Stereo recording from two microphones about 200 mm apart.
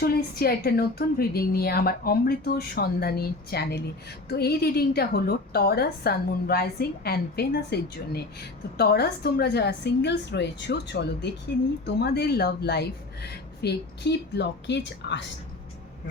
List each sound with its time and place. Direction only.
0.0 s a woman's voice: 50° left (ahead or behind)